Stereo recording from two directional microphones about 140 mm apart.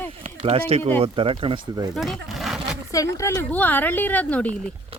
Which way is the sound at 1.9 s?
Centre (ahead or behind).